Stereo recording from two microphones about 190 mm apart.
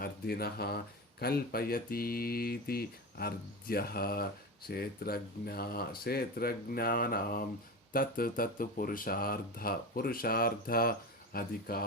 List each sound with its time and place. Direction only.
0.0 s speech: 55° left (ahead or behind)